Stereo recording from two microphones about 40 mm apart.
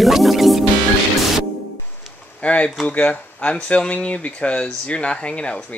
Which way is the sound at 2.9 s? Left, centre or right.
Left.